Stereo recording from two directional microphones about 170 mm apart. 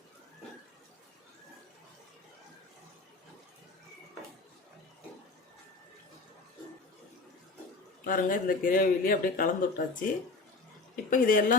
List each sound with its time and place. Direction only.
8.0 s speech: 55° left (ahead or behind)
11.1 s speech: 55° left (ahead or behind)